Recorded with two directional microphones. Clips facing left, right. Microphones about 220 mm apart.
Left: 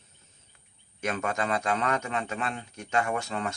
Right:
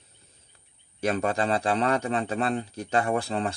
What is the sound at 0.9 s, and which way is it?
A man's voice, 35° right (ahead or behind).